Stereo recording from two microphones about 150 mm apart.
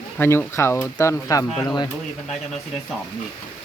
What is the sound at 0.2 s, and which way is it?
Speech, 15° left (ahead or behind).